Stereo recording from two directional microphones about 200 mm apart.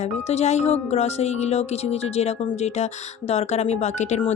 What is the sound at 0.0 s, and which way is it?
Speech, 35° left (ahead or behind).